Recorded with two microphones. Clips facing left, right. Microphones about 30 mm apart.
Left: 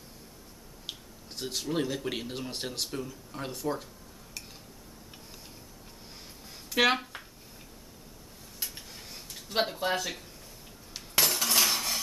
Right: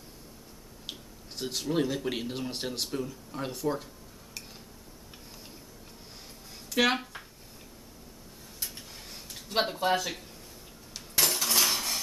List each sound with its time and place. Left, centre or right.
0.8 s speech: centre
6.7 s speech: centre
8.6 s dishes: centre
10.9 s cutlery: centre